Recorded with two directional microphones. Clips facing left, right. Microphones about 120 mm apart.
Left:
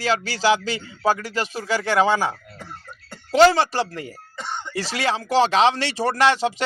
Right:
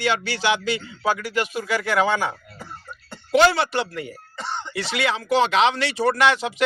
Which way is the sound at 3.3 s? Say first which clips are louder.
Left 2 dB; 35° left (ahead or behind).